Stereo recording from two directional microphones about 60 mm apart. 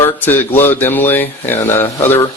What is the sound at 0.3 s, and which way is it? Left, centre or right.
Speech, left.